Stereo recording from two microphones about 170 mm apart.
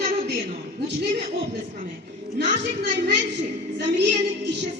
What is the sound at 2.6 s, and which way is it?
Speech, 80° right.